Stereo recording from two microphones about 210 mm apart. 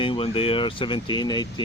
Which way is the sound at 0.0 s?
25° left (ahead or behind).